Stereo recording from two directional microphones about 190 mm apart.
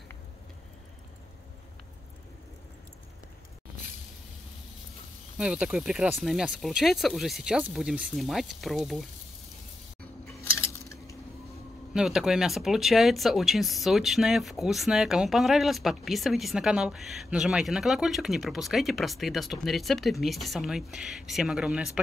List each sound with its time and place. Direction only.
5.4 s speech: 5° right (ahead or behind)
10.7 s cutlery: 15° left (ahead or behind)
11.9 s speech: 5° right (ahead or behind)